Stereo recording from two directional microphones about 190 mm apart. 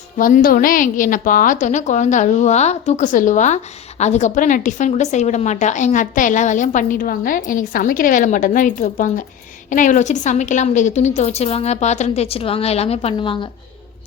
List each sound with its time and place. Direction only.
0.2 s a woman's voice: 45° left (ahead or behind); by 13.5 s 25° left (ahead or behind)